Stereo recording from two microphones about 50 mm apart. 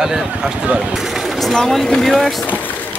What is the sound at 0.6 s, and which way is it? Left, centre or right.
Speech, right.